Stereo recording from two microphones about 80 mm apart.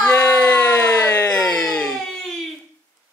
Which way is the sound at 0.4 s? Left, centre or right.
Centre.